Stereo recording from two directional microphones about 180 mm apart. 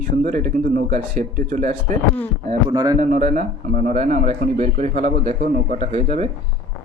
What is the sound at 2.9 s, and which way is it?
Speech, 45° right (ahead or behind).